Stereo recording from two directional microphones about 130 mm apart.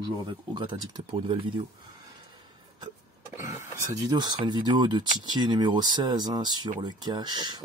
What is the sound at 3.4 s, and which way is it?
Speech, 25° right (ahead or behind).